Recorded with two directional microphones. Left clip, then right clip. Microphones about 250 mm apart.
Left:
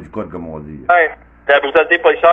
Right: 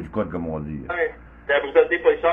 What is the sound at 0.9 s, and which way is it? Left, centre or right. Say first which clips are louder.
Speech: left 14 dB; left.